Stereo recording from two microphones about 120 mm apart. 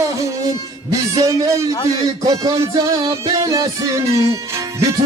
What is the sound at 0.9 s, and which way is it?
Music, 30° right (ahead or behind).